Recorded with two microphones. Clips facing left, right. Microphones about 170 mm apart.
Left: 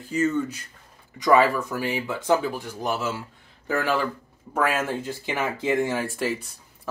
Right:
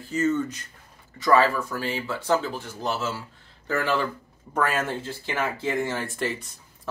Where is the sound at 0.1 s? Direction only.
10° left (ahead or behind).